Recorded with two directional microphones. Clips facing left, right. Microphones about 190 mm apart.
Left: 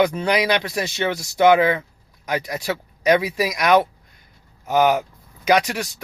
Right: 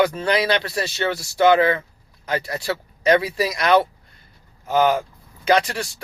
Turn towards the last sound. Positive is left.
turn(degrees=10)  # may be behind; listen again after turning